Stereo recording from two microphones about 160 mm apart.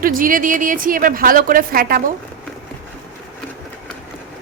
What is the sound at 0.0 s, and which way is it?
A woman's voice, 60° right (ahead or behind).